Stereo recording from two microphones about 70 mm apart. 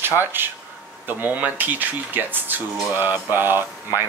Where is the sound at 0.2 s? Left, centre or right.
Right.